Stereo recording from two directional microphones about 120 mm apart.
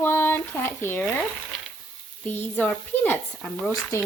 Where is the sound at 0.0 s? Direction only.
20° left (ahead or behind).